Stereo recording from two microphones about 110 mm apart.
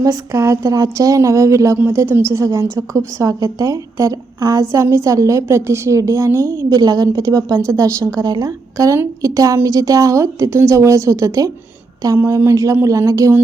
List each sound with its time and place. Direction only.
0.0 s a woman's voice: 30° right (ahead or behind)